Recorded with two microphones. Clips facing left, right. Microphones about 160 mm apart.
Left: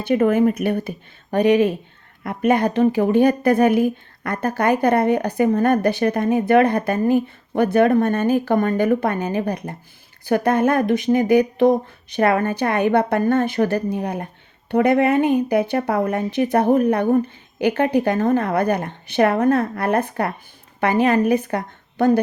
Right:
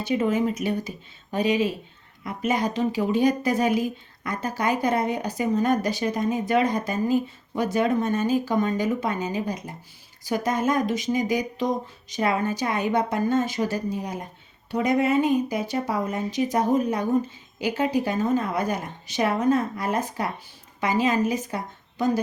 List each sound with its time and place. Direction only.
0.0 s speech: 55° left (ahead or behind)